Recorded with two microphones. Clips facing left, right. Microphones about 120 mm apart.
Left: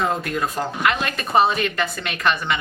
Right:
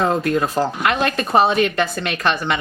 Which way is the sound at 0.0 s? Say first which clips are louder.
Right 5 dB; 30° right (ahead or behind).